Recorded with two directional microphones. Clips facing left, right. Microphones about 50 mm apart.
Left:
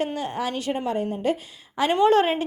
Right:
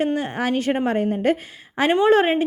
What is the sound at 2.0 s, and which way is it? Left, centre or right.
Speech, right.